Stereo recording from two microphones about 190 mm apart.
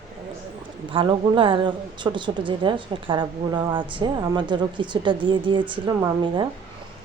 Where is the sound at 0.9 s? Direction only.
25° right (ahead or behind).